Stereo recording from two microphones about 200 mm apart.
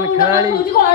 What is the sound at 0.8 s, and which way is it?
Speech, 45° left (ahead or behind).